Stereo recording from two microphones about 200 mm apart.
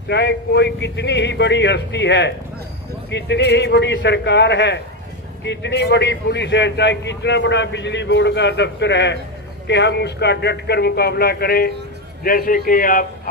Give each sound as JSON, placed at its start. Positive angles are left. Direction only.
{"t": 0.1, "sound": "a man's voice", "side_deg": 55}